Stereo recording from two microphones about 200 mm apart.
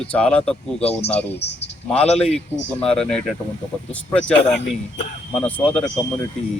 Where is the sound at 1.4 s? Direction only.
60° left (ahead or behind).